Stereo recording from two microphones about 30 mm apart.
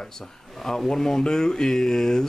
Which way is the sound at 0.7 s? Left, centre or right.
Centre.